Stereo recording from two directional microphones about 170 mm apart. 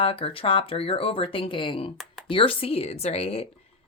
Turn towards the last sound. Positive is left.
turn(degrees=35)  # may be behind; listen again after turning